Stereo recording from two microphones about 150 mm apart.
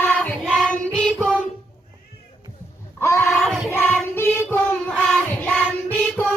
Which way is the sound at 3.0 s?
15° left (ahead or behind).